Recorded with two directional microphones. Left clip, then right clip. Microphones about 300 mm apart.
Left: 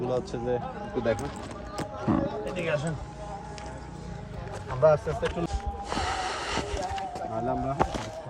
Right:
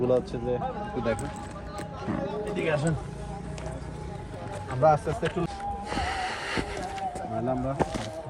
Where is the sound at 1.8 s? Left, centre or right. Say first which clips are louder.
Left 6 dB; left.